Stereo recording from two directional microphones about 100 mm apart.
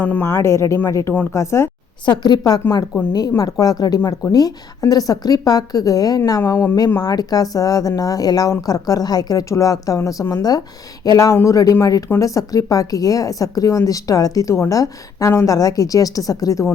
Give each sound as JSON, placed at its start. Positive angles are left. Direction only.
{"t": 0.0, "sound": "a woman's voice", "side_deg": 15}
{"t": 2.0, "sound": "a woman's voice", "side_deg": 45}
{"t": 6.4, "sound": "speech", "side_deg": 25}
{"t": 7.0, "sound": "a woman's voice", "side_deg": 40}